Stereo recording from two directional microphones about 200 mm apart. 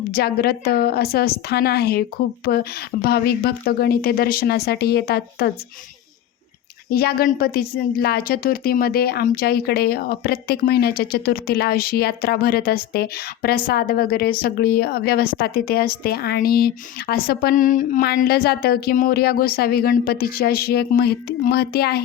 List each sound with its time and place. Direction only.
0.1 s a woman's voice: 50° left (ahead or behind)
6.9 s a woman's voice: 50° left (ahead or behind)